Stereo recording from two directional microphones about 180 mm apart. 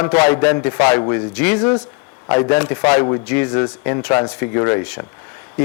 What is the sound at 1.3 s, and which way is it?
Speech, 10° left (ahead or behind).